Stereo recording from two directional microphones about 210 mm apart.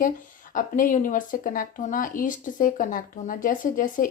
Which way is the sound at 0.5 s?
40° left (ahead or behind).